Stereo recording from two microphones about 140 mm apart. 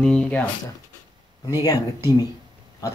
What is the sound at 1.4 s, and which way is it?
Speech, 25° left (ahead or behind).